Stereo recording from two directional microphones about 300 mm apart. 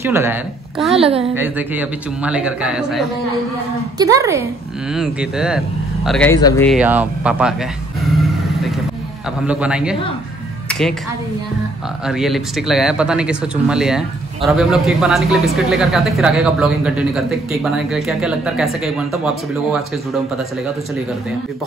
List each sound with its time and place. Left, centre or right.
0.0 s a woman's voice: centre
0.9 s a woman's voice: centre
1.3 s a woman's voice: centre
6.7 s speech: centre
8.0 s vehicle: centre
9.5 s speech: centre
10.7 s music: centre
12.1 s speech: centre